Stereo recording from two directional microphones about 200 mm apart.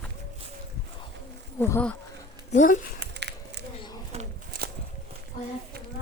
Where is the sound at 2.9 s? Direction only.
60° right (ahead or behind).